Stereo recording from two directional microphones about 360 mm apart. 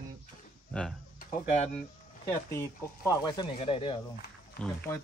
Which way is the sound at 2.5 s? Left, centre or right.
Centre.